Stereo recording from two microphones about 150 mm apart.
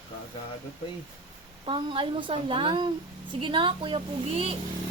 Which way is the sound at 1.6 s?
35° right (ahead or behind).